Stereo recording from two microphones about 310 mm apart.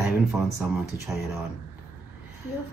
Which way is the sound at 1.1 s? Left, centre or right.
Centre.